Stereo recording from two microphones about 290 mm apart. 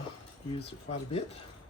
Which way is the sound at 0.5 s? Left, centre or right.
Centre.